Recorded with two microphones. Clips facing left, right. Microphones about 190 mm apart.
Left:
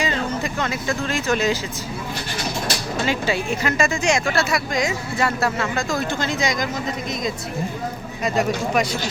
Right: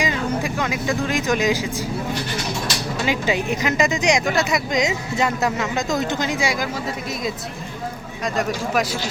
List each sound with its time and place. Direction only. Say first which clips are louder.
0.0 s speech: right 1 dB; 10° right (ahead or behind)
3.1 s speech: right 2 dB; 15° right (ahead or behind)
8.2 s a man's voice: left 2 dB; centre (ahead or behind)